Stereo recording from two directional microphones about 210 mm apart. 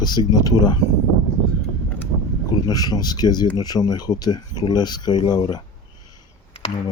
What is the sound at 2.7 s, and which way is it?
Speech, 20° left (ahead or behind).